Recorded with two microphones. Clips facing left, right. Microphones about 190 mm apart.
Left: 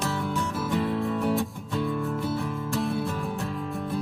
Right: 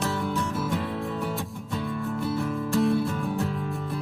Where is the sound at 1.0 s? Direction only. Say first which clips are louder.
Left 5 dB; centre (ahead or behind).